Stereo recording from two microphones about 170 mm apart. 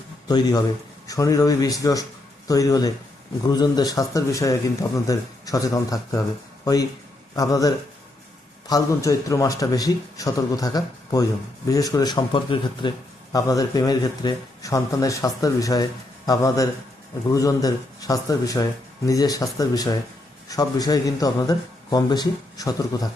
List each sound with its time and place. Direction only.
0.3 s speech: 25° left (ahead or behind)
7.3 s speech: 20° left (ahead or behind)